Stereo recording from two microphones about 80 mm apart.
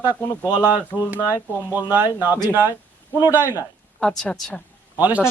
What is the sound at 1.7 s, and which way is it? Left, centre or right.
Speech, right.